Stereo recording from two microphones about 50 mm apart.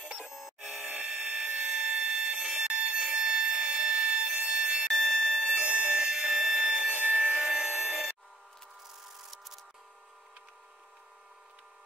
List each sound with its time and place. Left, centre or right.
0.3 s cash register: centre
0.7 s buzzer: right
1.5 s tools: right
2.4 s a sound: centre
4.8 s fire alarm: centre
5.6 s a sound: centre